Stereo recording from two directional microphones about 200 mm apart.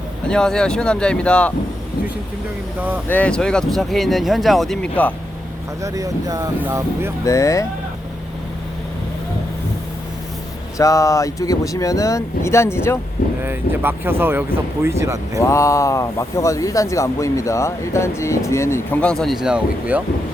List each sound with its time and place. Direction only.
0.3 s speech: 5° left (ahead or behind)
3.1 s speech: 5° left (ahead or behind)
5.8 s speech: 15° right (ahead or behind)
7.3 s speech: 15° left (ahead or behind)
10.8 s speech: 15° left (ahead or behind)
13.4 s speech: 10° right (ahead or behind)
15.4 s speech: 15° left (ahead or behind); by 20.0 s 5° right (ahead or behind)